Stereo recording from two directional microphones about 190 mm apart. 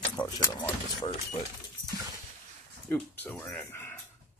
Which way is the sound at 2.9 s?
10° left (ahead or behind).